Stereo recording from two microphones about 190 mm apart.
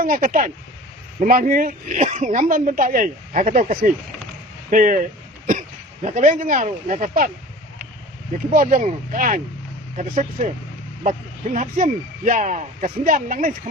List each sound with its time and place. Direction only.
0.0 s speech: 45° right (ahead or behind)
8.5 s speech: 45° right (ahead or behind)